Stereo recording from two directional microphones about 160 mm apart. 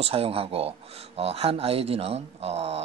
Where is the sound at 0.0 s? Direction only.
35° right (ahead or behind).